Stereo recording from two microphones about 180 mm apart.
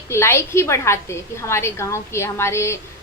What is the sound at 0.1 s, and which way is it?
A woman's voice, 15° left (ahead or behind).